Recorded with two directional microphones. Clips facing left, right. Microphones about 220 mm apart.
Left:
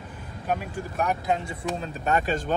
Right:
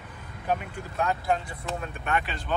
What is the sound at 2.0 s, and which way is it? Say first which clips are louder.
Speech: left 7 dB; 45° left (ahead or behind).